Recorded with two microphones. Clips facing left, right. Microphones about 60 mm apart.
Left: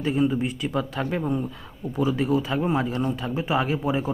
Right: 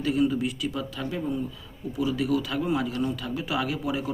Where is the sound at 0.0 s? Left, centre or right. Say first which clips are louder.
Left 1 dB; left.